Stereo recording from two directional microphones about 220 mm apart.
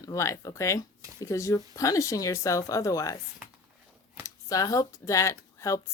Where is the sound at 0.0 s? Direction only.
15° left (ahead or behind).